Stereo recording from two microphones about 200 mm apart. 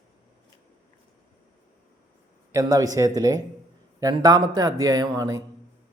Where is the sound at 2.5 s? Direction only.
15° right (ahead or behind).